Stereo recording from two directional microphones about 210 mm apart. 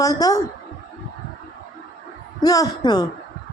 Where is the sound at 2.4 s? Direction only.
15° left (ahead or behind).